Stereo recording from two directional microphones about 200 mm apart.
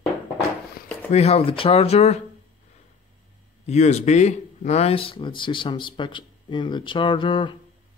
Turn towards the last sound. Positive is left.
turn(degrees=25)  # may be behind; listen again after turning